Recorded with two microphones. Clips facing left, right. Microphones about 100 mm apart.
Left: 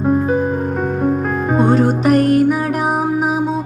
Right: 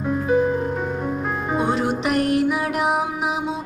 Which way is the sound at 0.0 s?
40° left (ahead or behind).